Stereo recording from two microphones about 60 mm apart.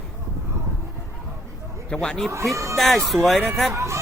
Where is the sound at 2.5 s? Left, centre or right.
Right.